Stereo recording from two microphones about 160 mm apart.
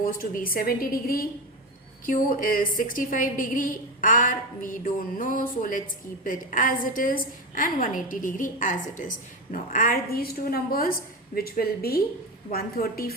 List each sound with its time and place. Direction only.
0.0 s a woman's voice: 60° left (ahead or behind)